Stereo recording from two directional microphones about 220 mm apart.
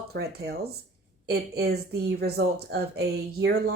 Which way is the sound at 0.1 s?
45° right (ahead or behind).